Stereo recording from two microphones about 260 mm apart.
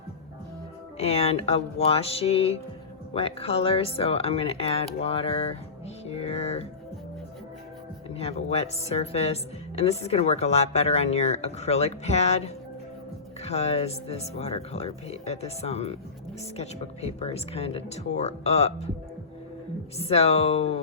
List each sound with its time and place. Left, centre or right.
0.9 s a woman's voice: left
6.1 s music: left
8.1 s a woman's voice: left
13.4 s a woman's voice: left
20.0 s a woman's voice: left